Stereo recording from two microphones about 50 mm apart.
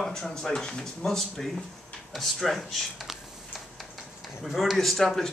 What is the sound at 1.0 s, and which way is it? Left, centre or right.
Speech, centre.